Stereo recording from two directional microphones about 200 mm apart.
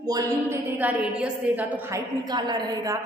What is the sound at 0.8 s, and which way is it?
A woman's voice, 5° right (ahead or behind).